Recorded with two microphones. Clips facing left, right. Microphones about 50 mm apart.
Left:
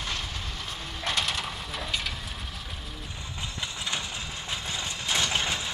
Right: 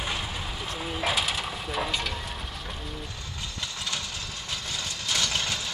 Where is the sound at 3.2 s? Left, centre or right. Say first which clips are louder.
Left 1 dB; left.